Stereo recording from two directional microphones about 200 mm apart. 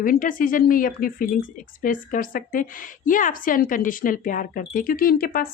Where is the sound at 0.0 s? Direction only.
45° left (ahead or behind).